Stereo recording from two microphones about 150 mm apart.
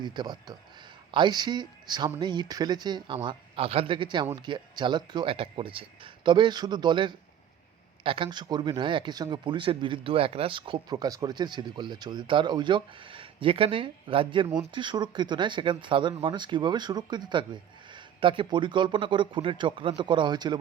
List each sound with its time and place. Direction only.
0.0 s speech: 30° right (ahead or behind)